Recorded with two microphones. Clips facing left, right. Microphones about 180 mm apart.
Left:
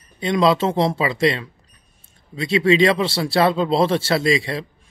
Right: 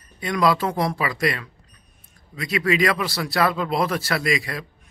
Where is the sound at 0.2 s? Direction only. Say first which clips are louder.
Left 4 dB; 25° left (ahead or behind).